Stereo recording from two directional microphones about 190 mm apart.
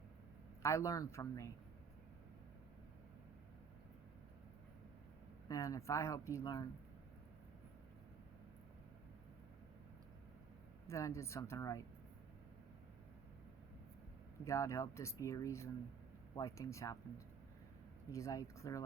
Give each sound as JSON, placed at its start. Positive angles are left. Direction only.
{"t": 0.6, "sound": "speech", "side_deg": 15}
{"t": 5.5, "sound": "speech", "side_deg": 15}
{"t": 10.8, "sound": "speech", "side_deg": 15}
{"t": 14.4, "sound": "speech", "side_deg": 15}
{"t": 18.1, "sound": "speech", "side_deg": 15}